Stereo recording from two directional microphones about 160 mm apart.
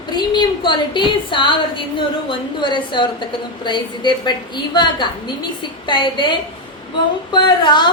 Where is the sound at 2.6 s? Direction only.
30° left (ahead or behind).